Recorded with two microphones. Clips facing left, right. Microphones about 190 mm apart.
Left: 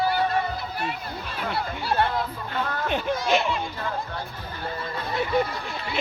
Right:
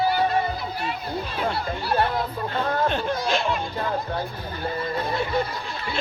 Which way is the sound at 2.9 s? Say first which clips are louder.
Right 1 dB; 15° left (ahead or behind).